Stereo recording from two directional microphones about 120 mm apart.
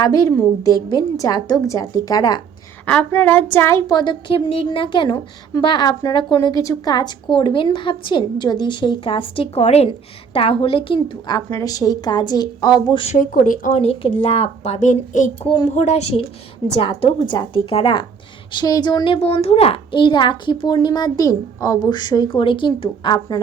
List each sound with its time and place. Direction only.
0.0 s a woman's voice: 30° left (ahead or behind)
2.8 s speech: 15° left (ahead or behind)
3.8 s a woman's voice: 40° left (ahead or behind)
11.3 s a woman's voice: 30° left (ahead or behind)
13.1 s speech: 90° left
14.2 s speech: 60° left (ahead or behind); by 15.2 s 90° left
15.7 s speech: 70° left (ahead or behind)
17.7 s a woman's voice: 45° left (ahead or behind)
18.5 s a woman's voice: 35° left (ahead or behind)
19.0 s a woman's voice: 55° left (ahead or behind); by 22.3 s 35° left (ahead or behind)
22.3 s a woman's voice: 45° left (ahead or behind)